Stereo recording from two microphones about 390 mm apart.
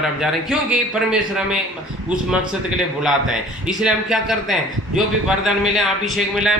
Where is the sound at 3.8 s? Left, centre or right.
Centre.